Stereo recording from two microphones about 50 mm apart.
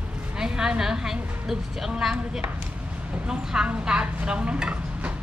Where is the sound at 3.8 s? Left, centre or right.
Centre.